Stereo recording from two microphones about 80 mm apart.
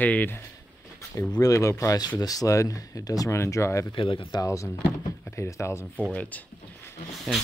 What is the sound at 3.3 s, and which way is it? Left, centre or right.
Speech, left.